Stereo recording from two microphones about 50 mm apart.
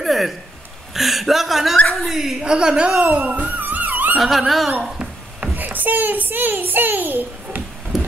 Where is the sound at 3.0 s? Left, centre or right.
Right.